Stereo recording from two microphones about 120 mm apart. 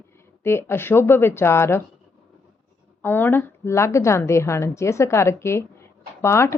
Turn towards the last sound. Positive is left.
turn(degrees=20)  # may be behind; listen again after turning